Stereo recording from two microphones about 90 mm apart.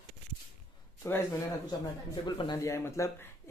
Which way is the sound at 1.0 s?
30° left (ahead or behind).